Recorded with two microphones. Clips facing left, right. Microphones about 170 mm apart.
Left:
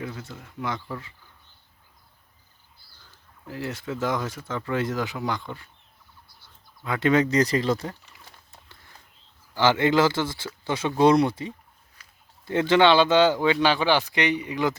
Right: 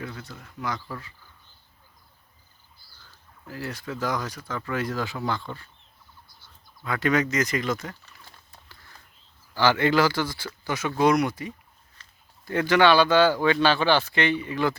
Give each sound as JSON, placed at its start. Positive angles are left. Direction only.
{"t": 0.0, "sound": "speech", "side_deg": 20}
{"t": 3.4, "sound": "speech", "side_deg": 20}
{"t": 6.8, "sound": "speech", "side_deg": 25}
{"t": 9.6, "sound": "speech", "side_deg": 20}
{"t": 12.0, "sound": "a sound", "side_deg": 10}
{"t": 12.5, "sound": "speech", "side_deg": 25}